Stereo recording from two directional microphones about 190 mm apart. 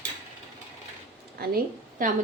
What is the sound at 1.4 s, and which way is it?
Speech, 55° right (ahead or behind).